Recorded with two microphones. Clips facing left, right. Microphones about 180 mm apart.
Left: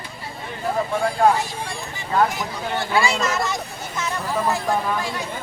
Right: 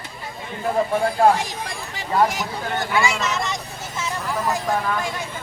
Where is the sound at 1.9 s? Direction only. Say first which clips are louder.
Right 1 dB; 90° right.